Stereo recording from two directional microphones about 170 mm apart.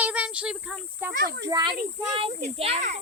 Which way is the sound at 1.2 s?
65° right (ahead or behind).